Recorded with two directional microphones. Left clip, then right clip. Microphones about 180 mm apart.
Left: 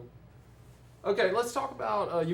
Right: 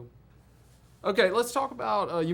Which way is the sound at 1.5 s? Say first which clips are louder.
Right 3 dB; 50° right (ahead or behind).